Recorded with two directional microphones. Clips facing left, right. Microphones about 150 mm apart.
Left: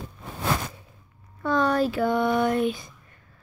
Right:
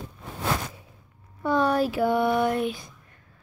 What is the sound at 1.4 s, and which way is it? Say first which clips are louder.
A woman's voice: even; 10° right (ahead or behind).